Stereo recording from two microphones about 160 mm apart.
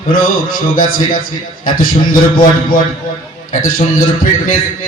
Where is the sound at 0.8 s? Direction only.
60° left (ahead or behind).